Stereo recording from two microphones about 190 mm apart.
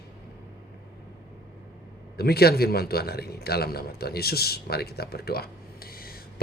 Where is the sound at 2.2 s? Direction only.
55° left (ahead or behind).